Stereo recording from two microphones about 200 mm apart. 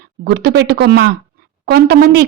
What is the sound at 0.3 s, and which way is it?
A woman's voice, 55° right (ahead or behind).